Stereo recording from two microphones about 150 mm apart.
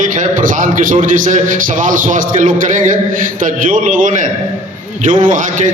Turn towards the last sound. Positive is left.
turn(degrees=-60)  # may be behind; listen again after turning